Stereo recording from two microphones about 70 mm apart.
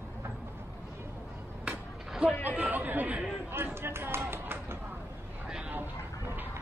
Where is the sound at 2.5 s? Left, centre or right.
Right.